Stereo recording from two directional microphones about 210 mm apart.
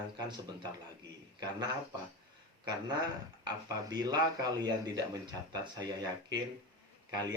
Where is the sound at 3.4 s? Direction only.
20° right (ahead or behind).